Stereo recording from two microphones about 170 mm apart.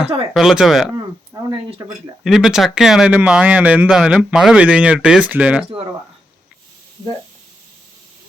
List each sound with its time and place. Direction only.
0.3 s speech: centre (ahead or behind)
1.3 s a sound: 20° right (ahead or behind)
2.2 s speech: centre (ahead or behind)